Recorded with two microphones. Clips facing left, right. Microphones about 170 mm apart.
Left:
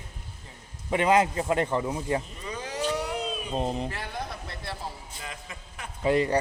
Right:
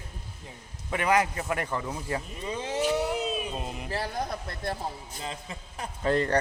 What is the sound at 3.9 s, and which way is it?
Speech, 40° right (ahead or behind).